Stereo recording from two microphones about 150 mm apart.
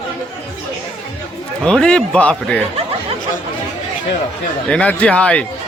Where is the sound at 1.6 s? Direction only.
5° left (ahead or behind).